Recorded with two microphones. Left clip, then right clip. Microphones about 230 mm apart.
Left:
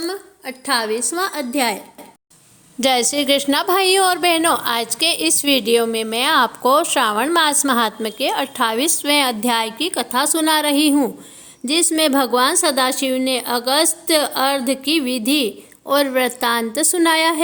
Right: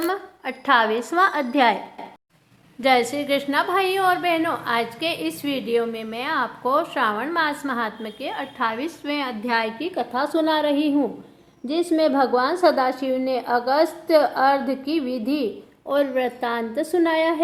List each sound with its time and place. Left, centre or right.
0.0 s a woman's voice: left
2.8 s a woman's voice: left